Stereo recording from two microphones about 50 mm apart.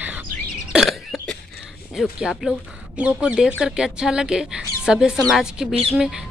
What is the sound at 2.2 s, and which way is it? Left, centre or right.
Speech, centre.